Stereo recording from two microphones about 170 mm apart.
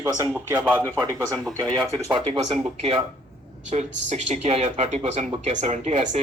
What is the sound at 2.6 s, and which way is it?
Speech, 35° right (ahead or behind).